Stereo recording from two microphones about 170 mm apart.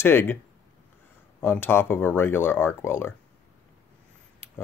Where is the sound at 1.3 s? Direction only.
15° left (ahead or behind).